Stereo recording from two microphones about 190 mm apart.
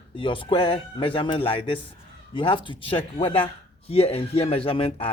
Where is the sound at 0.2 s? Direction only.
25° left (ahead or behind).